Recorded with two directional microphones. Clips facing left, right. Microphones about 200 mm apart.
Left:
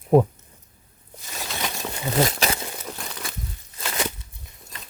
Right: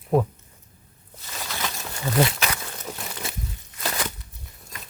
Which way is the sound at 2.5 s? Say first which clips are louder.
Left 3 dB; 25° left (ahead or behind).